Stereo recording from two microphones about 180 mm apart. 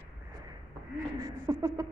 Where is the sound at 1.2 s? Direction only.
15° right (ahead or behind).